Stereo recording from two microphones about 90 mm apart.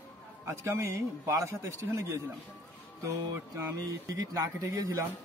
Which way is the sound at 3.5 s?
35° right (ahead or behind).